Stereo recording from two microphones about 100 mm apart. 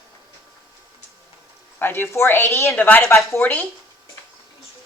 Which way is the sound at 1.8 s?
20° left (ahead or behind).